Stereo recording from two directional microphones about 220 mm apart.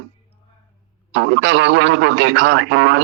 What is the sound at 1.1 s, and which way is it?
A man's voice, 55° right (ahead or behind).